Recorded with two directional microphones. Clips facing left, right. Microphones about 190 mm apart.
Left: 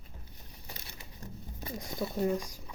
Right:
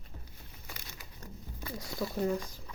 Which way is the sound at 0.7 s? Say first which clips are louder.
Left 1 dB; 25° left (ahead or behind).